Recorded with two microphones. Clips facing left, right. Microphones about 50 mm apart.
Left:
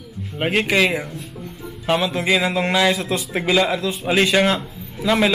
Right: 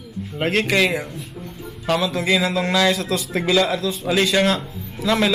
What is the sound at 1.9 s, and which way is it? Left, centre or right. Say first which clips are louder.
A man's voice: left 1 dB; left.